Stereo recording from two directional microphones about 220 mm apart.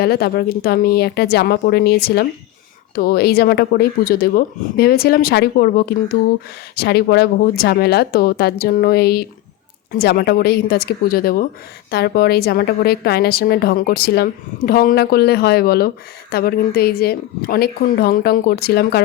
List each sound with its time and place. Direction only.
0.0 s a woman's voice: 45° left (ahead or behind)